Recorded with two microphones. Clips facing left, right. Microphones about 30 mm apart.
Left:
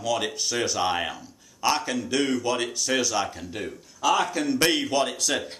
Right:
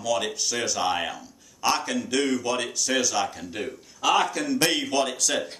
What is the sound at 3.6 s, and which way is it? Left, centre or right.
Speech, centre.